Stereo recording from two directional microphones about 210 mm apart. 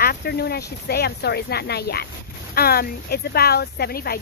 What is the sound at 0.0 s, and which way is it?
Speech, 50° left (ahead or behind).